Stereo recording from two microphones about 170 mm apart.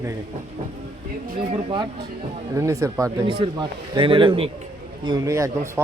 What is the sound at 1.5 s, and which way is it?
A man's voice, 30° right (ahead or behind).